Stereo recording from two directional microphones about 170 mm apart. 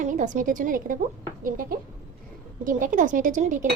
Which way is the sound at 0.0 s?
50° right (ahead or behind).